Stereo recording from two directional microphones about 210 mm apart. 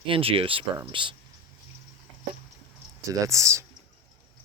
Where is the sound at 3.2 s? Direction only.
15° right (ahead or behind).